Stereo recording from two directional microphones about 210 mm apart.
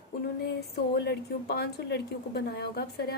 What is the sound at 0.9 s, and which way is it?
A woman's voice, 50° left (ahead or behind).